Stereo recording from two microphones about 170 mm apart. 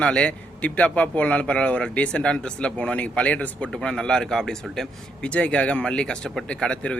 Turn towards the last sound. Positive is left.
turn(degrees=5)  # may be behind; listen again after turning